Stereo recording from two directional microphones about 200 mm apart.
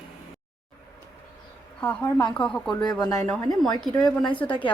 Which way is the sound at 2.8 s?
20° left (ahead or behind).